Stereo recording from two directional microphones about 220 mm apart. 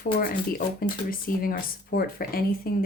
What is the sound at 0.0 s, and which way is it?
A woman's voice, 40° left (ahead or behind).